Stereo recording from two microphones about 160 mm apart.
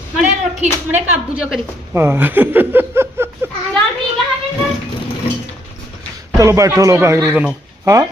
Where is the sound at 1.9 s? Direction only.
15° right (ahead or behind).